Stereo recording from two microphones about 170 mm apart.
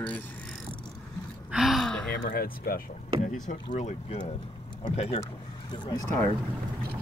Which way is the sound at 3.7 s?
40° left (ahead or behind).